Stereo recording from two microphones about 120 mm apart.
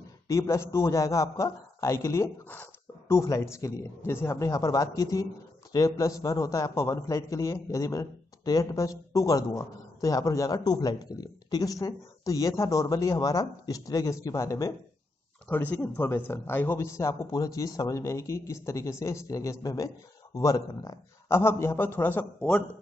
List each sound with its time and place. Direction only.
0.3 s a man's voice: 25° left (ahead or behind)
15.4 s a man's voice: 15° left (ahead or behind)